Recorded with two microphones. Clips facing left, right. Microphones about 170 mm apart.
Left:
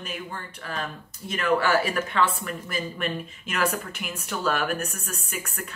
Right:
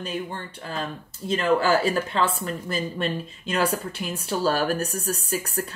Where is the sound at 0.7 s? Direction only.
30° right (ahead or behind).